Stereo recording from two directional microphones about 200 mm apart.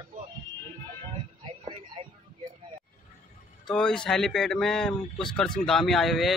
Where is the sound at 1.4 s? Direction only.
25° right (ahead or behind).